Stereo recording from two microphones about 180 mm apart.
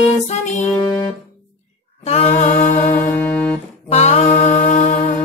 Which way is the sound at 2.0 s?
35° left (ahead or behind).